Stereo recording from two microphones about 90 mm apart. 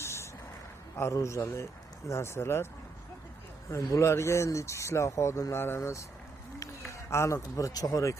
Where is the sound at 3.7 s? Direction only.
35° left (ahead or behind).